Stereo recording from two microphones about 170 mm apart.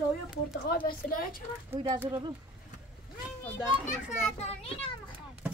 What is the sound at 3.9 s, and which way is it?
A child's voice, 40° left (ahead or behind).